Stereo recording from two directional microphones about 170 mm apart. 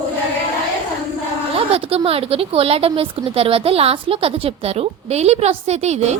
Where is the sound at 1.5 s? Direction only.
35° right (ahead or behind).